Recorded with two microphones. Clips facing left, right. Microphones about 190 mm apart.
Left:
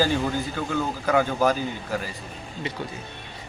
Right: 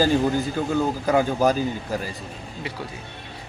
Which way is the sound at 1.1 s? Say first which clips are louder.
Right 1 dB; 15° right (ahead or behind).